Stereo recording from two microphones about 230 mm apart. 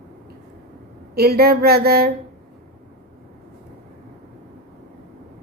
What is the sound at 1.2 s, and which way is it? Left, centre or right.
Speech, right.